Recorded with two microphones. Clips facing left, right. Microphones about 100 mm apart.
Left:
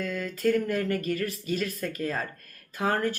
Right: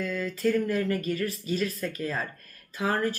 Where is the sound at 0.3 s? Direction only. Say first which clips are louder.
Left 1 dB; 50° left (ahead or behind).